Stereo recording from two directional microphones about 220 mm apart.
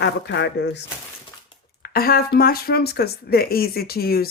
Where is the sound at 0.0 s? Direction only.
50° left (ahead or behind).